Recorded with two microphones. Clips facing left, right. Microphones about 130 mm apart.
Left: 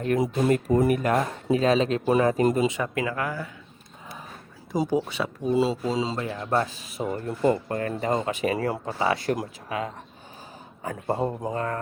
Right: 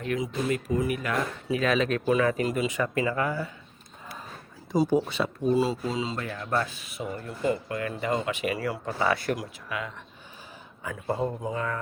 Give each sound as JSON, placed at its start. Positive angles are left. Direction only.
{"t": 0.0, "sound": "speech", "side_deg": 45}
{"t": 2.8, "sound": "speech", "side_deg": 10}
{"t": 4.8, "sound": "speech", "side_deg": 10}
{"t": 5.5, "sound": "speech", "side_deg": 25}
{"t": 6.1, "sound": "speech", "side_deg": 20}
{"t": 9.0, "sound": "speech", "side_deg": 30}
{"t": 10.8, "sound": "a man's voice", "side_deg": 45}